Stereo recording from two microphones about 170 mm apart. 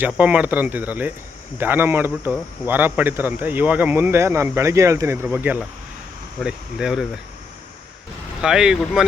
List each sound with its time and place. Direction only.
0.0 s a man's voice: 10° right (ahead or behind)
8.4 s speech: 5° right (ahead or behind)